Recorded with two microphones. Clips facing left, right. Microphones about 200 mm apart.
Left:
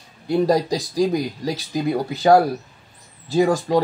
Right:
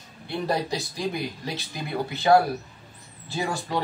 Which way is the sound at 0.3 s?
40° left (ahead or behind).